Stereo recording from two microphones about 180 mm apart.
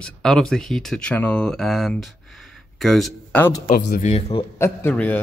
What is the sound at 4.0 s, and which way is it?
Speech, 40° left (ahead or behind).